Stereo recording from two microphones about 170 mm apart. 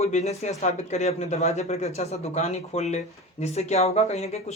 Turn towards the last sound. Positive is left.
turn(degrees=40)  # may be behind; listen again after turning